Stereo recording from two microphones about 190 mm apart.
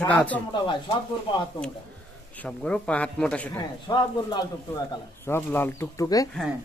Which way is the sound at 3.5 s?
20° left (ahead or behind).